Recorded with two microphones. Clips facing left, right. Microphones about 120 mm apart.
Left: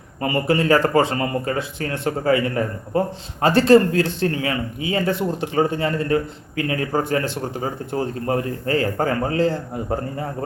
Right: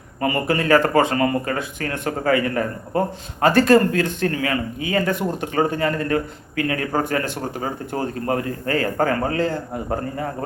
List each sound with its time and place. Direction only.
0.2 s a man's voice: 30° left (ahead or behind)